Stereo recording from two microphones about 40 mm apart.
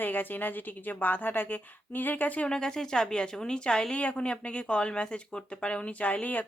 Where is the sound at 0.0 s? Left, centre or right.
Left.